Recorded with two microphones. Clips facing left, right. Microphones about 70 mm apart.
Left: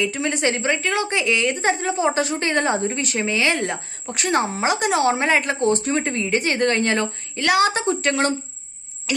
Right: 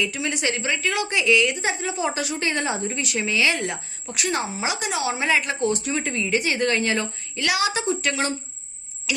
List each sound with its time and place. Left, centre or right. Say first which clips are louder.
0.0 s a woman's voice: left 4 dB; left
9.1 s clock: left 3 dB; left